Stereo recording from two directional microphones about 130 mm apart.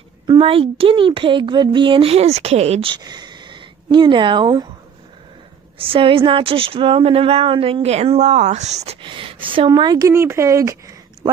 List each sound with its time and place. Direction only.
0.3 s speech: 45° right (ahead or behind)
3.0 s speech: 35° right (ahead or behind)
5.8 s speech: 45° right (ahead or behind); by 8.9 s 60° right (ahead or behind)
9.0 s speech: 40° right (ahead or behind); by 11.3 s 25° right (ahead or behind)